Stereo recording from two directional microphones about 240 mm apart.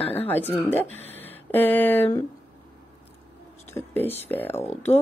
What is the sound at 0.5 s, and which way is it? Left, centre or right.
Speech, centre.